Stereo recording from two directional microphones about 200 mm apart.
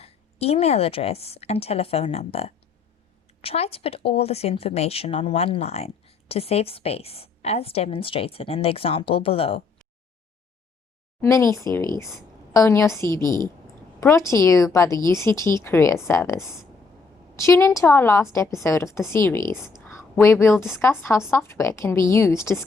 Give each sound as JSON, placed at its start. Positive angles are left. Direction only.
{"t": 0.0, "sound": "a woman's voice", "side_deg": 30}
{"t": 11.2, "sound": "a woman's voice", "side_deg": 15}